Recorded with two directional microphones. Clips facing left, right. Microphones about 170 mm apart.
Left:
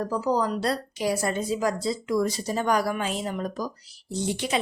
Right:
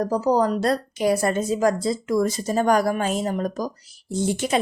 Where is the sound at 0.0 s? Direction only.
40° right (ahead or behind).